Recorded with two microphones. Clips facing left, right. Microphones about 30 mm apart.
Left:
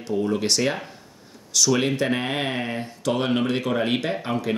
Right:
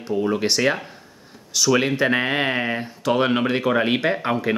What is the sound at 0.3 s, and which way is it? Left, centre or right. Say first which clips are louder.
Speech: right 4 dB; centre.